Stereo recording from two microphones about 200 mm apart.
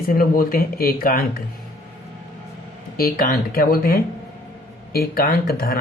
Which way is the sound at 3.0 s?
50° left (ahead or behind).